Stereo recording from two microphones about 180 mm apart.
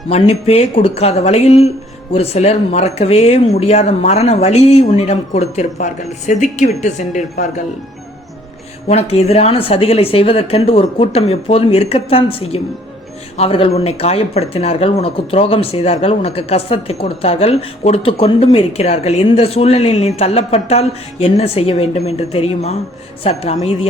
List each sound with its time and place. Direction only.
0.1 s speech: 35° left (ahead or behind)
8.9 s speech: 35° left (ahead or behind)